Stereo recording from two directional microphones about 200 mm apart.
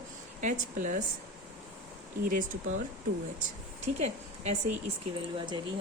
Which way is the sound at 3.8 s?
35° right (ahead or behind).